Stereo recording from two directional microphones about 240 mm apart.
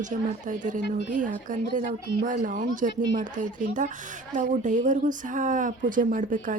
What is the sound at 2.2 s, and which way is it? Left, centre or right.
A woman's voice, right.